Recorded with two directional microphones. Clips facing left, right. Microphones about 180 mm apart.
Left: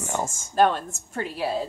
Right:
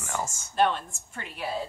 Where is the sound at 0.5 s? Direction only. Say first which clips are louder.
Left 4 dB; 45° left (ahead or behind).